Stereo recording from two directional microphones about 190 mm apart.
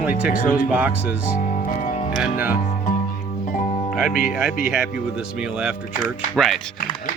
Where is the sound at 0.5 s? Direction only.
5° right (ahead or behind).